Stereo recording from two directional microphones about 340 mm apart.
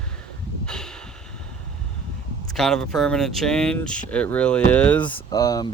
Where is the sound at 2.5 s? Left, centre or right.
Centre.